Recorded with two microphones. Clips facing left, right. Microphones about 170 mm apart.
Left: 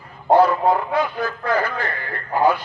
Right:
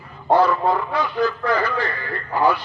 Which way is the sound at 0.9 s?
50° left (ahead or behind).